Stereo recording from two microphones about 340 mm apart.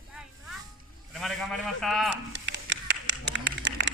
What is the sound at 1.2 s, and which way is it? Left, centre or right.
Speech, centre.